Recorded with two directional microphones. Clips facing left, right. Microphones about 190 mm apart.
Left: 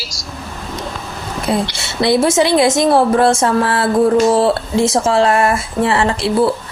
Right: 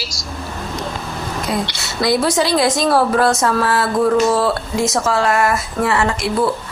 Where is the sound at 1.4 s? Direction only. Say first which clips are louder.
Left 6 dB; 25° left (ahead or behind).